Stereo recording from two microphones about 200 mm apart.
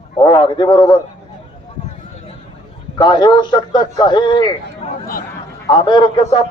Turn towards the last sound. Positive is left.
turn(degrees=25)  # may be behind; listen again after turning